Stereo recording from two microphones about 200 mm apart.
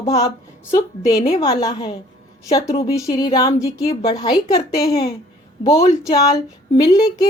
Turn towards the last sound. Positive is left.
turn(degrees=20)  # may be behind; listen again after turning